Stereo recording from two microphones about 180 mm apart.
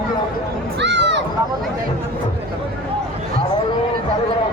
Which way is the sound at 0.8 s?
75° right (ahead or behind).